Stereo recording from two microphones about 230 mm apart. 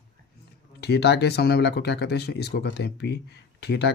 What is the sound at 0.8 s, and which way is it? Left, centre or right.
Speech, left.